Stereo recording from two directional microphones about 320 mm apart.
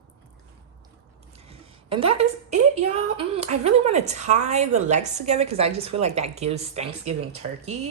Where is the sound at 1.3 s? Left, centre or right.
Centre.